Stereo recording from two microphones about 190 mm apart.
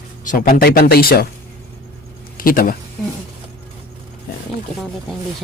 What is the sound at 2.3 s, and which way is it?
Speech, 50° left (ahead or behind).